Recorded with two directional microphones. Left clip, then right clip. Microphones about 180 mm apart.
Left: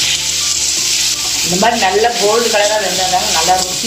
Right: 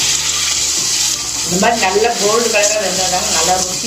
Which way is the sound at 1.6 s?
30° left (ahead or behind).